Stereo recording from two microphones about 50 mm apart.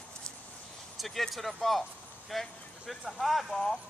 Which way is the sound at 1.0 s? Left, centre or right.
Centre.